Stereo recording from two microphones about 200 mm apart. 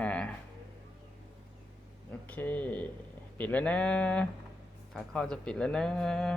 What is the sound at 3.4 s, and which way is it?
Speech, 10° left (ahead or behind).